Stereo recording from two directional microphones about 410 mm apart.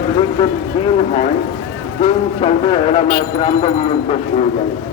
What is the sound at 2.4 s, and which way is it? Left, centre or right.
A man's voice, centre.